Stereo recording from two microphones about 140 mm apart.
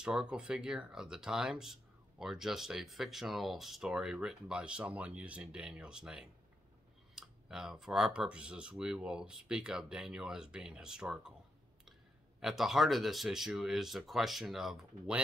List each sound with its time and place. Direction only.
0.0 s speech: 5° right (ahead or behind)
12.4 s speech: 5° right (ahead or behind)